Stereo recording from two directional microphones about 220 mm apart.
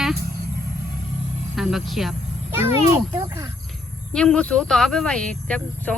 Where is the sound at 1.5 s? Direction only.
Centre (ahead or behind).